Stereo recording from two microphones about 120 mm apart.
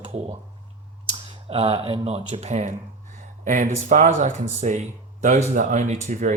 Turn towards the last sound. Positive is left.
turn(degrees=-80)